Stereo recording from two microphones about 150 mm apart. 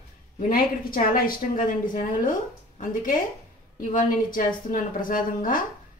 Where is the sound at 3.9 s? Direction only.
65° left (ahead or behind).